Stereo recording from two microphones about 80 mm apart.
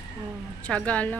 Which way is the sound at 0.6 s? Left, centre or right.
Centre.